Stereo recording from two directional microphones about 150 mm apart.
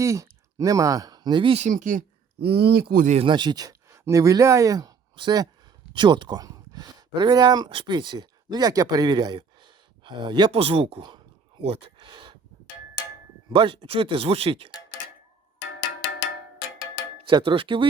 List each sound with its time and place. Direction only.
0.0 s speech: 20° right (ahead or behind)
1.6 s speech: 60° right (ahead or behind); by 3.1 s 80° right
3.2 s speech: 30° right (ahead or behind)
11.6 s a sound: 35° right (ahead or behind)
13.5 s speech: 35° right (ahead or behind)
17.2 s speech: 35° right (ahead or behind)